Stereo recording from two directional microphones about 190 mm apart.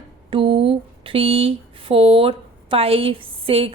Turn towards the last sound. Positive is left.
turn(degrees=-30)  # may be behind; listen again after turning